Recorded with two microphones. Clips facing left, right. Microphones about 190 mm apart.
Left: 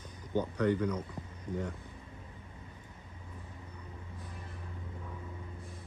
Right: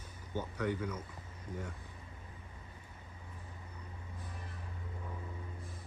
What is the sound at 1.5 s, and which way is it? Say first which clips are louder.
Speech: left 6 dB; 25° left (ahead or behind).